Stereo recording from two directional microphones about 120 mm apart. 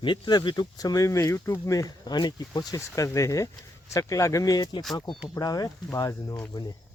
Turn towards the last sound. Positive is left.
turn(degrees=30)  # may be behind; listen again after turning